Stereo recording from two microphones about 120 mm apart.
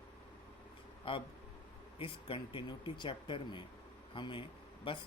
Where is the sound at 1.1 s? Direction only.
50° left (ahead or behind).